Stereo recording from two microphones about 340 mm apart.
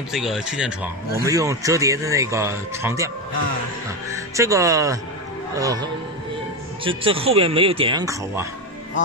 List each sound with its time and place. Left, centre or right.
0.1 s speech: centre
4.1 s speech: centre